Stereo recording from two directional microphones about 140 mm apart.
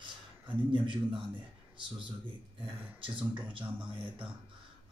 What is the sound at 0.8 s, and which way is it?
Speech, 35° right (ahead or behind).